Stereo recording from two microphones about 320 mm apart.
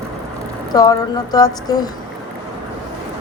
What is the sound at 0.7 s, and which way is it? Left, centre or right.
A woman's voice, centre.